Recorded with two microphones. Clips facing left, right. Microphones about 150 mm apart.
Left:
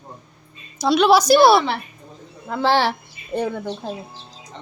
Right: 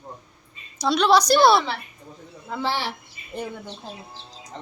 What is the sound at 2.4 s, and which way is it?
A woman's voice, 80° left.